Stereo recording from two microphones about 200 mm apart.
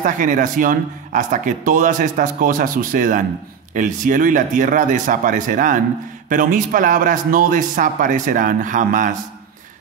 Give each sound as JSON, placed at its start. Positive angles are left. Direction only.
{"t": 0.0, "sound": "speech", "side_deg": -40}